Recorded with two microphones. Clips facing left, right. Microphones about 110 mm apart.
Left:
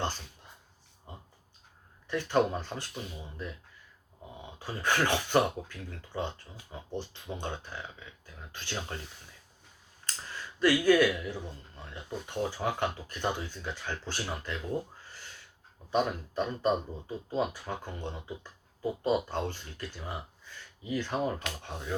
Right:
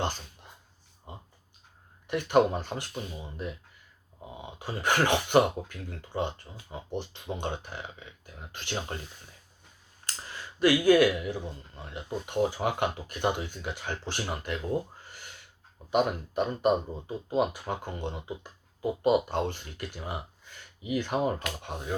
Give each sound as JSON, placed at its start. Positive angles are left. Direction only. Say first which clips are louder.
{"t": 2.0, "sound": "speech", "louder": "right 4 dB", "side_deg": -15}
{"t": 10.2, "sound": "speech", "louder": "right 2 dB", "side_deg": -10}
{"t": 14.5, "sound": "a sound", "louder": "right 5 dB", "side_deg": -15}
{"t": 15.9, "sound": "speech", "louder": "right 3 dB", "side_deg": -15}
{"t": 20.0, "sound": "gasp", "louder": "right 3 dB", "side_deg": -10}
{"t": 20.9, "sound": "speech", "louder": "right 3 dB", "side_deg": -15}